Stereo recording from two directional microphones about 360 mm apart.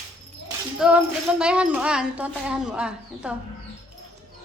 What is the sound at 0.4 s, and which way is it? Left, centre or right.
Speech, centre.